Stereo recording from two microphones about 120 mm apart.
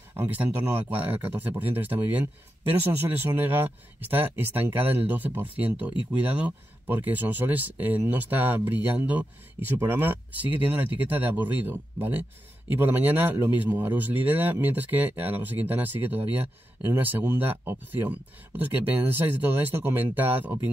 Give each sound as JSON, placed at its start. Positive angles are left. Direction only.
{"t": 0.1, "sound": "speech", "side_deg": -15}